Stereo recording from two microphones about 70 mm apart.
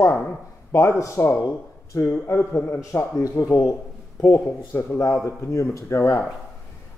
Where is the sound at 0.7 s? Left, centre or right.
Left.